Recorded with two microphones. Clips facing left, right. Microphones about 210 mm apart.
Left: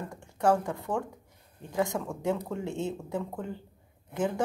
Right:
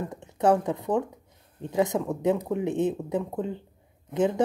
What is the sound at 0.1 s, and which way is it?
Speech, 20° right (ahead or behind).